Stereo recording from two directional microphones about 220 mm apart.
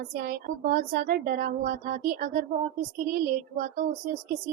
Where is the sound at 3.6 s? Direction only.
35° right (ahead or behind).